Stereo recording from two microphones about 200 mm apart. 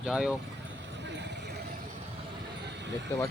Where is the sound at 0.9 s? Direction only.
60° right (ahead or behind).